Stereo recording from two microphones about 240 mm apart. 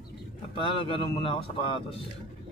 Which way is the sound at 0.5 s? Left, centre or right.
Left.